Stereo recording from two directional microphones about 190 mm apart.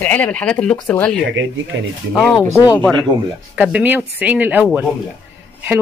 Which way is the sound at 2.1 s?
10° left (ahead or behind).